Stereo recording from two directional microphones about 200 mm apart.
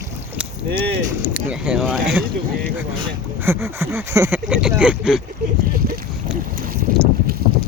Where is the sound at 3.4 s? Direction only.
10° right (ahead or behind).